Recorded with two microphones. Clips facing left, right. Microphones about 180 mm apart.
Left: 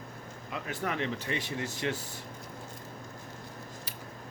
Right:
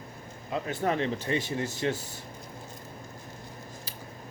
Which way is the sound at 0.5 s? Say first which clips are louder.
Right 6 dB; 30° right (ahead or behind).